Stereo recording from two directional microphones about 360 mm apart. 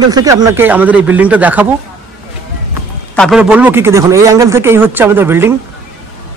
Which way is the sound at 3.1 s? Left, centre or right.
Centre.